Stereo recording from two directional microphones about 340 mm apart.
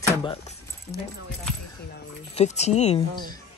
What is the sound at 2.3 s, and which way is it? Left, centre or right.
Speech, centre.